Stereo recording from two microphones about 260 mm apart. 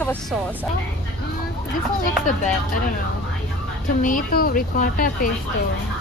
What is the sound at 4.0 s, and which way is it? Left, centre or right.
Speech, left.